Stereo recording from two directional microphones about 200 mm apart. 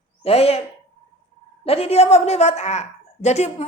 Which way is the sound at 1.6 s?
30° left (ahead or behind).